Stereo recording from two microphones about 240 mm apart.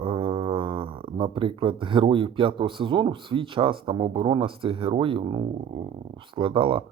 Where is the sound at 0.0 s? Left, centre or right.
Right.